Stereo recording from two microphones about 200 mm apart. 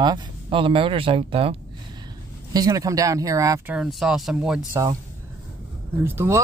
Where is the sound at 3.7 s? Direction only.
Centre (ahead or behind).